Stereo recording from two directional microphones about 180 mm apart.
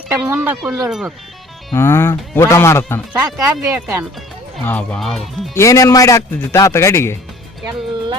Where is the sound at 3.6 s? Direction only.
15° right (ahead or behind).